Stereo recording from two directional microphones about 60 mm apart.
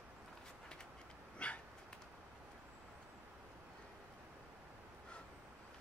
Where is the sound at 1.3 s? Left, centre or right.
Left.